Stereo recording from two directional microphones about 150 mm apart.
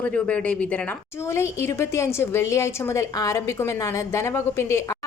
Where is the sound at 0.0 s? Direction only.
5° left (ahead or behind).